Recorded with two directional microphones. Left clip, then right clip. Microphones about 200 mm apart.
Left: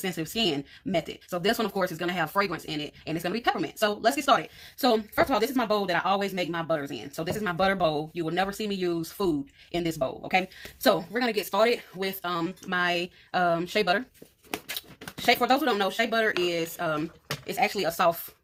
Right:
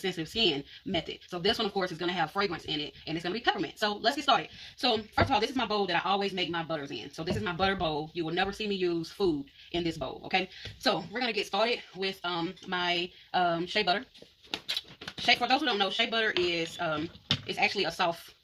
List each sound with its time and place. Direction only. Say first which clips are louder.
0.0 s speech: even; 40° left (ahead or behind)
15.3 s speech: left 3 dB; 45° left (ahead or behind)